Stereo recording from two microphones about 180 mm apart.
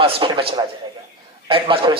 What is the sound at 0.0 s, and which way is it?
A man's voice, 30° right (ahead or behind).